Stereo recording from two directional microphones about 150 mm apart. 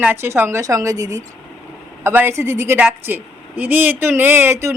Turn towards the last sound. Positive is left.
turn(degrees=-20)  # may be behind; listen again after turning